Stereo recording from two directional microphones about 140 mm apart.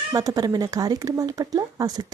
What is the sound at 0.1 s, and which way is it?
Speech, 25° right (ahead or behind).